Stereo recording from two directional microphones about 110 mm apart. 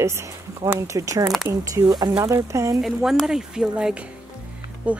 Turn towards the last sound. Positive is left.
turn(degrees=-15)  # may be behind; listen again after turning